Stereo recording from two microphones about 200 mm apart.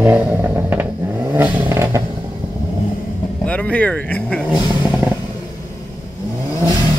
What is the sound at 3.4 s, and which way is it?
Speech, 5° left (ahead or behind).